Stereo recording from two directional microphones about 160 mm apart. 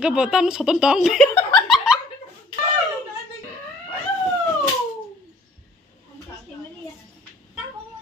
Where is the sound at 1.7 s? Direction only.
5° right (ahead or behind).